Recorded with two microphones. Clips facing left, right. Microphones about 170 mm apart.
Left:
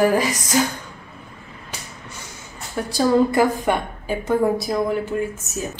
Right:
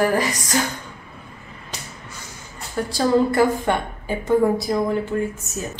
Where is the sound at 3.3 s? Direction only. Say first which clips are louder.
Even; 15° left (ahead or behind).